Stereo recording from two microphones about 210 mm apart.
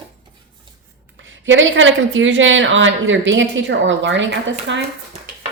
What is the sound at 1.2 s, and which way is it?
A woman's voice, 65° right (ahead or behind).